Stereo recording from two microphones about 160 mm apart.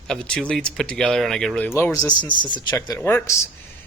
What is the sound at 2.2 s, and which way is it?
Speech, 30° left (ahead or behind).